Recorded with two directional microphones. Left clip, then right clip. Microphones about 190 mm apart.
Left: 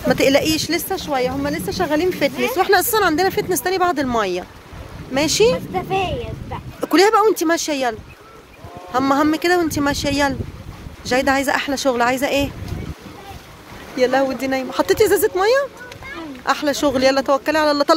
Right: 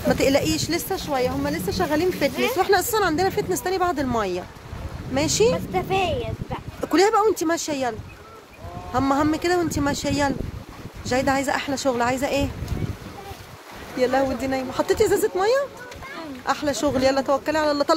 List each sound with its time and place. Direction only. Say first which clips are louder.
0.1 s speech: left 5 dB; 5° left (ahead or behind)
5.7 s speech: left 2 dB; 20° right (ahead or behind)
6.8 s speech: left 5 dB; 10° left (ahead or behind)
8.9 s speech: left 4 dB; 5° left (ahead or behind)
13.9 s speech: left 4 dB; 10° left (ahead or behind)